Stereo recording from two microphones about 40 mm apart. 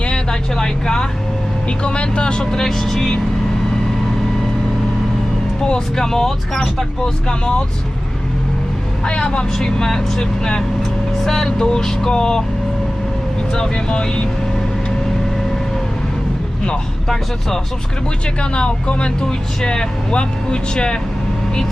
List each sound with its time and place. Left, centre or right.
0.0 s vehicle: left
0.5 s speech: centre
5.6 s speech: left
6.1 s speech: centre
7.0 s speech: centre
9.0 s speech: left
13.5 s speech: centre
18.5 s speech: left